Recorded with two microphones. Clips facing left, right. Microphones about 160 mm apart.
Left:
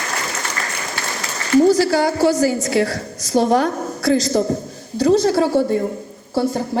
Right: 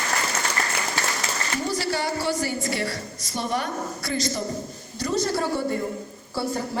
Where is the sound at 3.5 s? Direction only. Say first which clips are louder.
Left 10 dB; 90° left; by 4.4 s 75° left (ahead or behind).